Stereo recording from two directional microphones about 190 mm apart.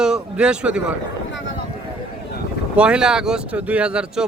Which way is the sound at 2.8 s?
5° right (ahead or behind).